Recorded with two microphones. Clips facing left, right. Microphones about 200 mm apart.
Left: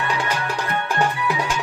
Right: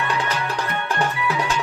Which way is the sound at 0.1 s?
10° left (ahead or behind).